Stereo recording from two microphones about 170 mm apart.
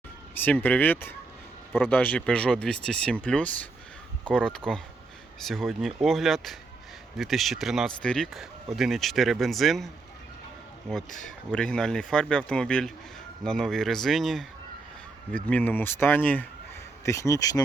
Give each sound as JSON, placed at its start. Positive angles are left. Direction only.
{"t": 0.3, "sound": "speech", "side_deg": 10}
{"t": 15.4, "sound": "speech", "side_deg": 10}